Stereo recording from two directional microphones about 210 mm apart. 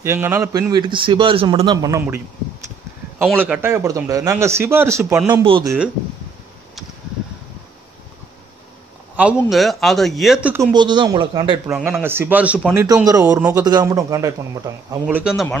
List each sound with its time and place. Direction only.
0.0 s a man's voice: 10° right (ahead or behind)
5.4 s speech: 25° right (ahead or behind)
9.1 s a man's voice: 5° right (ahead or behind)
10.7 s speech: 20° right (ahead or behind)
11.6 s a man's voice: 5° right (ahead or behind)
12.8 s a man's voice: 15° right (ahead or behind)